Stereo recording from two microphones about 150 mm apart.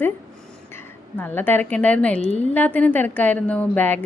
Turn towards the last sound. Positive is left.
turn(degrees=10)  # may be behind; listen again after turning